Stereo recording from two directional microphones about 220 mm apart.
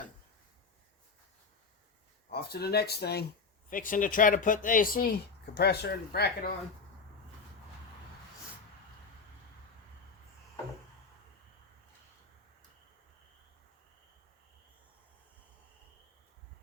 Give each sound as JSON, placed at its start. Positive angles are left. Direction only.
{"t": 2.3, "sound": "speech", "side_deg": 45}